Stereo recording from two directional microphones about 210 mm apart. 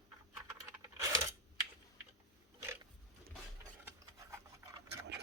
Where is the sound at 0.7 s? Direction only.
15° right (ahead or behind).